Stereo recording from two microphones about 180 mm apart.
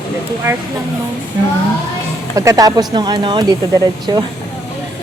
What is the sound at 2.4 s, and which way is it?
Speech, 20° right (ahead or behind).